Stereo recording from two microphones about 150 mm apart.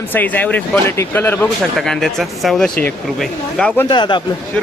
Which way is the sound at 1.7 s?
5° left (ahead or behind).